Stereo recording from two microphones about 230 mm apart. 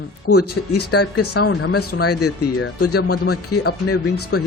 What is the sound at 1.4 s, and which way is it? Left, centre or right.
Speech, left.